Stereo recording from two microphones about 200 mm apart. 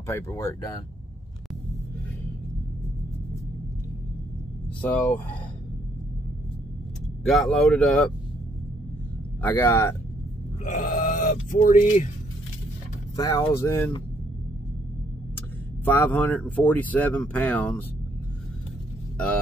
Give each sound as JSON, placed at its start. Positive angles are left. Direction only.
{"t": 0.0, "sound": "speech", "side_deg": 15}
{"t": 4.9, "sound": "speech", "side_deg": 5}
{"t": 7.2, "sound": "speech", "side_deg": 0}
{"t": 9.4, "sound": "speech", "side_deg": 10}
{"t": 10.6, "sound": "grunt", "side_deg": 35}
{"t": 11.5, "sound": "speech", "side_deg": 40}
{"t": 13.1, "sound": "speech", "side_deg": 20}
{"t": 15.8, "sound": "speech", "side_deg": 10}